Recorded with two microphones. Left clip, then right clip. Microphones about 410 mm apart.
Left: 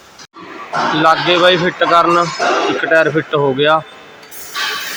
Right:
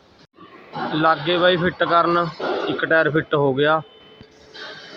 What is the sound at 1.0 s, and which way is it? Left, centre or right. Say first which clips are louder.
Speech: left 6 dB; right.